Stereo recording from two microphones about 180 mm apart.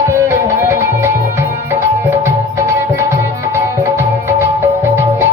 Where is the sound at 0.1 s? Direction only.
15° right (ahead or behind).